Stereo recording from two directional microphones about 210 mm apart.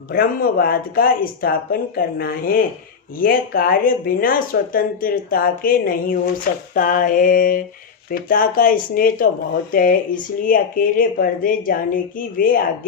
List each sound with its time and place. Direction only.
0.1 s speech: 45° left (ahead or behind)